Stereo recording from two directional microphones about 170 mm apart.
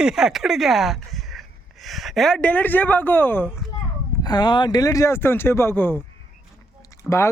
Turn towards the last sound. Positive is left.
turn(degrees=15)  # may be behind; listen again after turning